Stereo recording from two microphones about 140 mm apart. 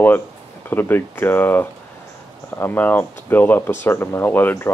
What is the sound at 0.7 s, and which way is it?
Speech, 15° left (ahead or behind).